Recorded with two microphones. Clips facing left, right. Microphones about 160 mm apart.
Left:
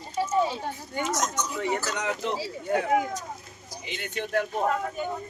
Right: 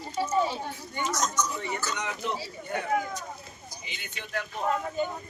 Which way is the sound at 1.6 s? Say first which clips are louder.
Left 6 dB; 70° left (ahead or behind).